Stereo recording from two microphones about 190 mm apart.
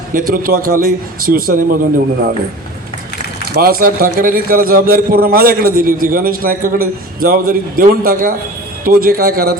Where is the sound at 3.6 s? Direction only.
50° right (ahead or behind).